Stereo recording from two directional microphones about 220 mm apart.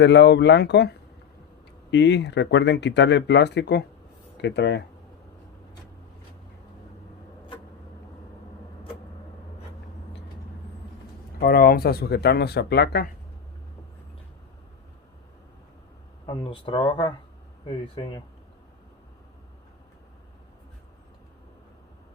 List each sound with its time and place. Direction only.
0.0 s speech: 50° left (ahead or behind)
11.3 s speech: 45° left (ahead or behind)
16.2 s speech: 20° left (ahead or behind)